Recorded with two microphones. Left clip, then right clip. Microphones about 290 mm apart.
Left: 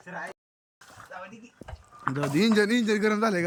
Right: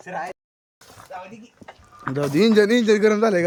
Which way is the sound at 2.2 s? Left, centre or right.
Centre.